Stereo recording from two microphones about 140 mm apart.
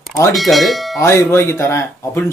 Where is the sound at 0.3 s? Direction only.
Centre (ahead or behind).